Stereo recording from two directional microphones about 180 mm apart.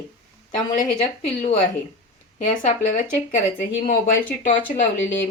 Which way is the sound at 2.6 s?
45° left (ahead or behind).